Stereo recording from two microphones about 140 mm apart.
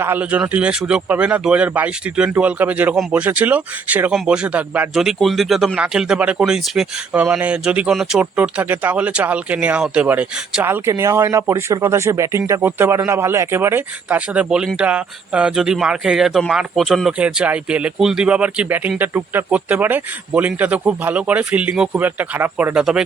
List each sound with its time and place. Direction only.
0.0 s speech: 10° right (ahead or behind)